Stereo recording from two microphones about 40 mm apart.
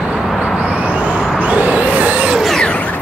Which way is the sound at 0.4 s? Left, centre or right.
Right.